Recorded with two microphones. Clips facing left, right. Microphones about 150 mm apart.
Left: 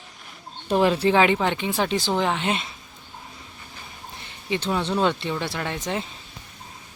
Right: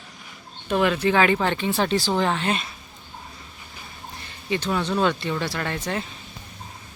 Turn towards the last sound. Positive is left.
turn(degrees=15)  # may be behind; listen again after turning